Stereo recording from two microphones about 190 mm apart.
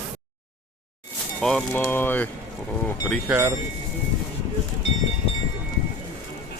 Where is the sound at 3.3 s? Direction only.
5° right (ahead or behind).